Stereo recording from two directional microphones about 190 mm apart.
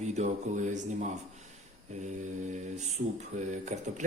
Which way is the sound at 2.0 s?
40° right (ahead or behind).